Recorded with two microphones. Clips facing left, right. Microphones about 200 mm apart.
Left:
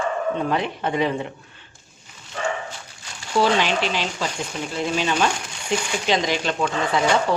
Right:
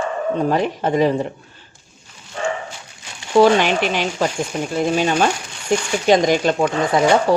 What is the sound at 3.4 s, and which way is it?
Speech, 50° right (ahead or behind).